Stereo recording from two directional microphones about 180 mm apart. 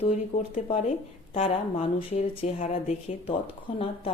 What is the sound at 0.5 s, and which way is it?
Speech, 40° left (ahead or behind).